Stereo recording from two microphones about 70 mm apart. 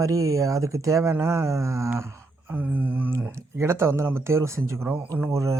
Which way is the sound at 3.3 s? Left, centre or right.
Right.